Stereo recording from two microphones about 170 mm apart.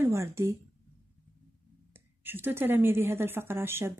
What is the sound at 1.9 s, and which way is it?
Speech, 10° right (ahead or behind).